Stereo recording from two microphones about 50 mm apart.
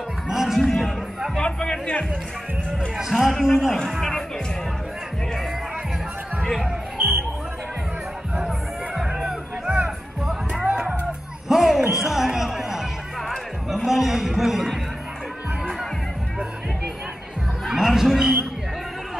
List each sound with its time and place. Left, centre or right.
0.3 s music: centre
0.7 s speech: centre
1.3 s speech: centre
3.0 s speech: centre
6.5 s music: centre
8.4 s music: centre
10.7 s music: centre
11.4 s music: centre
13.8 s a sound: centre
17.6 s a sound: centre